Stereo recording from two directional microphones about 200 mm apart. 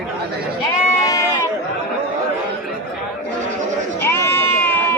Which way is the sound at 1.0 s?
15° left (ahead or behind).